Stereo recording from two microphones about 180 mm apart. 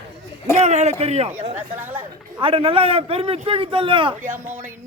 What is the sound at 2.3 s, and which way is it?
A man's voice, 30° right (ahead or behind).